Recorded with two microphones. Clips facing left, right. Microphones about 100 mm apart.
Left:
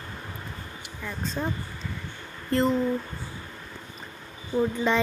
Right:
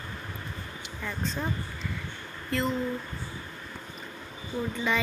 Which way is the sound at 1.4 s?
5° left (ahead or behind).